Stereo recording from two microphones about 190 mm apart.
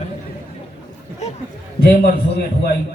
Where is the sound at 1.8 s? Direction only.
55° left (ahead or behind).